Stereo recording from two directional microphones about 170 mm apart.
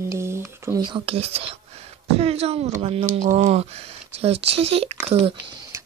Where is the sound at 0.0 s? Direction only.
15° right (ahead or behind).